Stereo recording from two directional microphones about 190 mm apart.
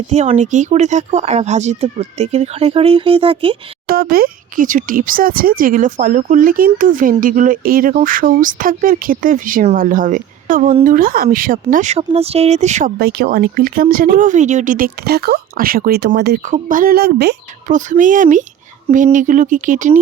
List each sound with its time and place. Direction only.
0.1 s speech: 35° right (ahead or behind)
3.8 s speech: 50° right (ahead or behind)
13.0 s speech: 55° right (ahead or behind)
16.4 s speech: 45° right (ahead or behind); by 17.3 s 60° right (ahead or behind)
17.7 s speech: 40° right (ahead or behind)